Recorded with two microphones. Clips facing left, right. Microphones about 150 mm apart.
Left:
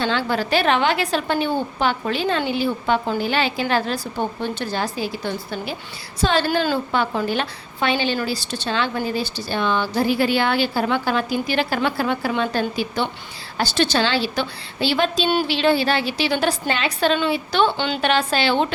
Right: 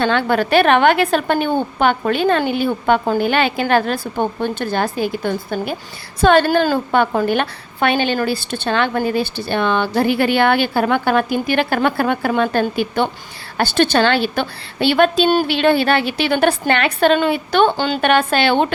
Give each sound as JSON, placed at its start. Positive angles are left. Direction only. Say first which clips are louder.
{"t": 0.0, "sound": "a woman's voice", "louder": "right 5 dB", "side_deg": -55}